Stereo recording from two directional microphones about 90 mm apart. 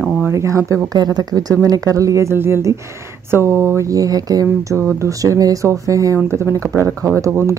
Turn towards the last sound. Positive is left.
turn(degrees=-25)  # may be behind; listen again after turning